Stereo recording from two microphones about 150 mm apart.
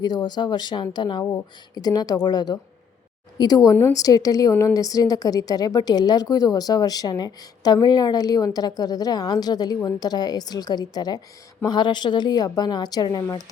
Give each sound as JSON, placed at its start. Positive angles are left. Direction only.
{"t": 0.0, "sound": "a woman's voice", "side_deg": 30}